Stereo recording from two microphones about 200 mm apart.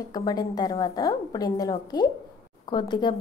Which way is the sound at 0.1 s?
20° left (ahead or behind).